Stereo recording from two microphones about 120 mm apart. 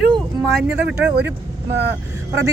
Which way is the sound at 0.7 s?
10° right (ahead or behind).